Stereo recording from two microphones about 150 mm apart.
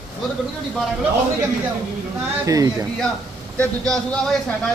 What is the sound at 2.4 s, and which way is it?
Speech, 20° right (ahead or behind).